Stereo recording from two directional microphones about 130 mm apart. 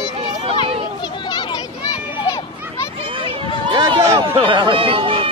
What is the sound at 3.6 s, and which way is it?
Run, 35° right (ahead or behind).